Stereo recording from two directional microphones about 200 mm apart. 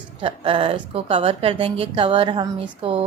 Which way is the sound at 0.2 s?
25° right (ahead or behind).